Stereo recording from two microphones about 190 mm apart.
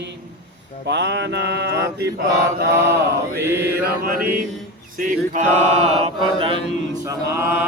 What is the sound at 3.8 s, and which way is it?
Mantra, 50° right (ahead or behind).